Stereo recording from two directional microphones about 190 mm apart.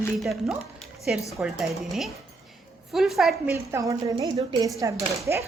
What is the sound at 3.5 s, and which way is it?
A woman's voice, 15° right (ahead or behind).